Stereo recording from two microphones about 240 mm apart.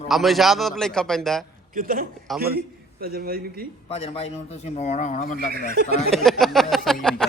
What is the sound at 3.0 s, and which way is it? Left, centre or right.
Speech, right.